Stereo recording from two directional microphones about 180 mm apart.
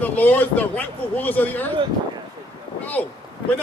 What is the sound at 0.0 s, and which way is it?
Speech, 10° left (ahead or behind).